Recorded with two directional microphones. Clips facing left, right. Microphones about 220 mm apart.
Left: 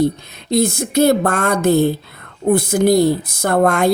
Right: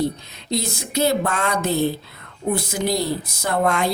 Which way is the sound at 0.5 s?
50° left (ahead or behind).